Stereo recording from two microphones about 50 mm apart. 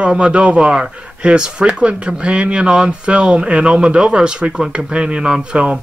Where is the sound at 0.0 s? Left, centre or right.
Right.